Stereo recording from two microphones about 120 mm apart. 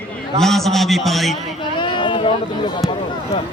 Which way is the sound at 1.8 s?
45° left (ahead or behind).